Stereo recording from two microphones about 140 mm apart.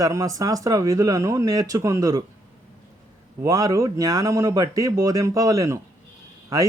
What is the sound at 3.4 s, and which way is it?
Speech, 25° right (ahead or behind).